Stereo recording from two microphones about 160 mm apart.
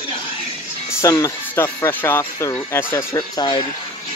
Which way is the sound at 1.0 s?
20° left (ahead or behind).